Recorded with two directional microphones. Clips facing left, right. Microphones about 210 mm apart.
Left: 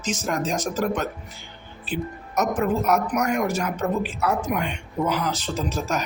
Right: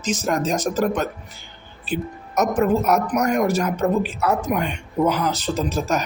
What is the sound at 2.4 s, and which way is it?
A woman's voice, 40° right (ahead or behind).